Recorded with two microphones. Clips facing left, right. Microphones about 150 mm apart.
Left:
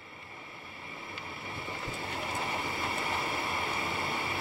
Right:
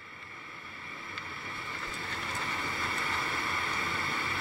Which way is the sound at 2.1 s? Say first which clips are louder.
Left 4 dB; 15° left (ahead or behind).